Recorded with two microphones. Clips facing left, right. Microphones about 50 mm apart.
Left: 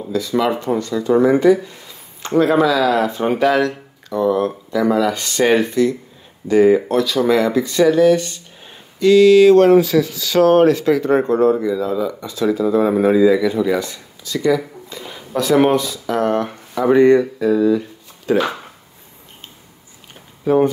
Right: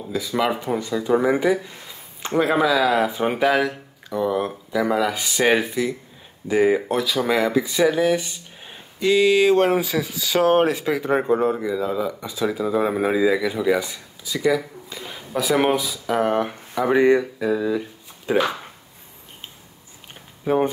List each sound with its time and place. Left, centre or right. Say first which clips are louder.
0.1 s speech: left 4 dB; centre
18.4 s speech: left 2 dB; centre
20.4 s speech: left 5 dB; centre